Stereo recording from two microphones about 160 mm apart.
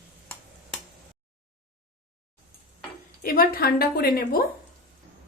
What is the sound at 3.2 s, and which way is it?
A woman's voice, 65° left (ahead or behind).